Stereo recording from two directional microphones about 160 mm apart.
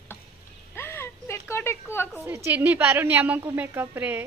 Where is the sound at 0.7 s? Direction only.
15° left (ahead or behind).